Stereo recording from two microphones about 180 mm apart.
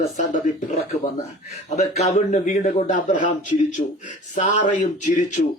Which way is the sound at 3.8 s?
30° left (ahead or behind).